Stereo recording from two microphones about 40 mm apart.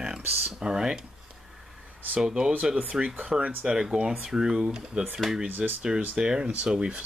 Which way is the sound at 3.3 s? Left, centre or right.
Centre.